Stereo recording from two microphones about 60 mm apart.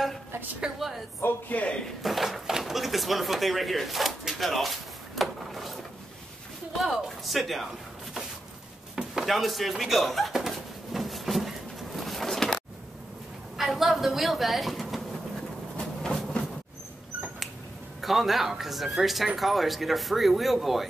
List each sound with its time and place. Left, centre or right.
0.6 s a woman's voice: centre
1.2 s a man's voice: left
2.0 s speech: centre
8.9 s a sound: centre
13.6 s speech: centre
16.0 s a sound: centre
18.0 s speech: centre